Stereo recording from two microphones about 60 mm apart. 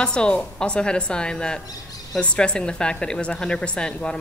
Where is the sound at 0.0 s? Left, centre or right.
Centre.